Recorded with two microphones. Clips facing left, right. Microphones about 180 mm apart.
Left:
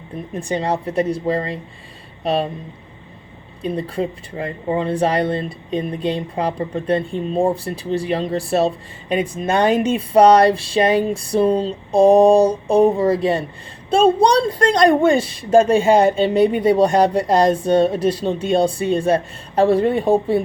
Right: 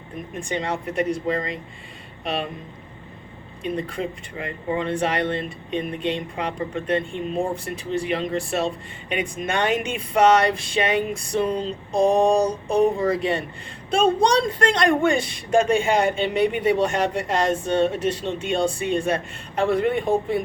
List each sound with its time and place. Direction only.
0.3 s a woman's voice: 35° left (ahead or behind)
3.6 s a woman's voice: 35° left (ahead or behind)